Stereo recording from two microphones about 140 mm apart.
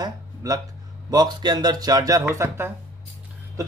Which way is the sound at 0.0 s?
25° right (ahead or behind).